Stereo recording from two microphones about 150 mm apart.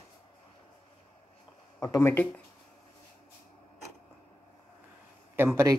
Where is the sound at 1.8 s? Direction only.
20° left (ahead or behind).